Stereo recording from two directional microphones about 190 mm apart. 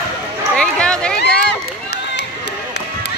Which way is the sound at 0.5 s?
5° left (ahead or behind).